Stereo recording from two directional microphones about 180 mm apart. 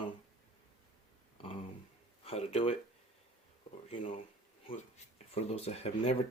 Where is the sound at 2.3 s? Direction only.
30° left (ahead or behind).